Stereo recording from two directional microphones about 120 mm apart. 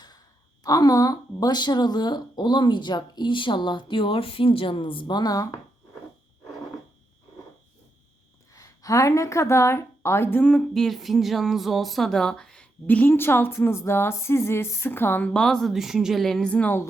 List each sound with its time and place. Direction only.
0.6 s a woman's voice: 30° left (ahead or behind)
8.5 s a woman's voice: 30° left (ahead or behind)
10.4 s a sound: 5° left (ahead or behind)